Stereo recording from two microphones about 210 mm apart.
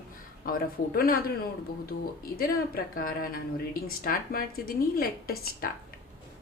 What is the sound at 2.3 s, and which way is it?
Speech, 45° left (ahead or behind).